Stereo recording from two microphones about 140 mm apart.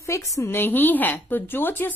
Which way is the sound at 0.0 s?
20° left (ahead or behind).